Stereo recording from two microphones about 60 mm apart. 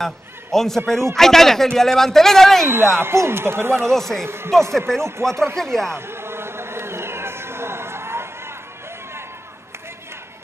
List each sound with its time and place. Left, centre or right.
0.0 s a man's voice: centre
2.6 s speech: right
3.9 s speech: centre
5.9 s a sound: right